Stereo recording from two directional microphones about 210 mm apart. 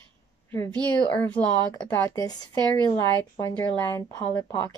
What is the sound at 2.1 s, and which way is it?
Speech, 15° left (ahead or behind).